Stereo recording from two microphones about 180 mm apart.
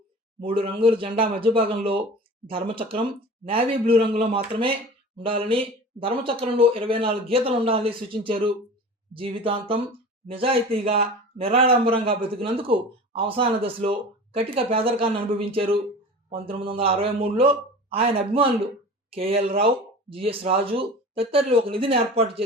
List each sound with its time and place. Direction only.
0.4 s speech: 30° right (ahead or behind)